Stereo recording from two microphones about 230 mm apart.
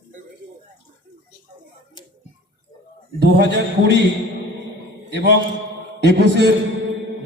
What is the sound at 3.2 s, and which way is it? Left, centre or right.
Speech, right.